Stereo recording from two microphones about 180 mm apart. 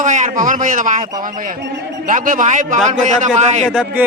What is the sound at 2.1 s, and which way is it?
A man's voice, 50° right (ahead or behind).